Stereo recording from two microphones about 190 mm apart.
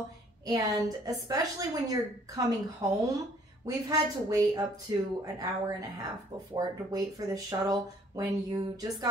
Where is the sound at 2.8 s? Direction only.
20° right (ahead or behind).